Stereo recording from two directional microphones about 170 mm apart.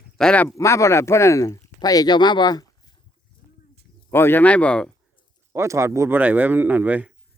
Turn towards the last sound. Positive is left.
turn(degrees=-10)  # may be behind; listen again after turning